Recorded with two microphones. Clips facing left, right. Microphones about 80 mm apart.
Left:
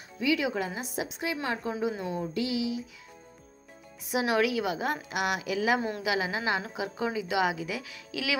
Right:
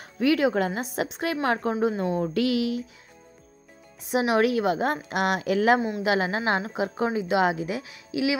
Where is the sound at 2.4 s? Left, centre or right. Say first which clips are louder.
Right 5 dB; right.